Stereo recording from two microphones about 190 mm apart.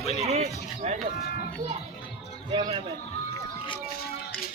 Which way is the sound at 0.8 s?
35° right (ahead or behind).